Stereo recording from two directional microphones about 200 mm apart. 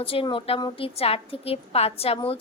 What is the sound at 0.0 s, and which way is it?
A woman's voice, 25° left (ahead or behind).